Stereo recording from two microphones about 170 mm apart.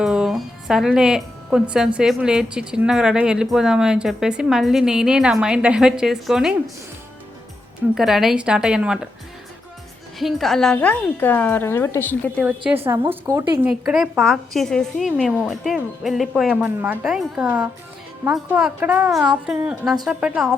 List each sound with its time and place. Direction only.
0.0 s speech: 5° right (ahead or behind)
7.9 s speech: centre (ahead or behind)
10.2 s a woman's voice: centre (ahead or behind)
12.4 s a woman's voice: 10° right (ahead or behind)
13.8 s a woman's voice: 5° right (ahead or behind)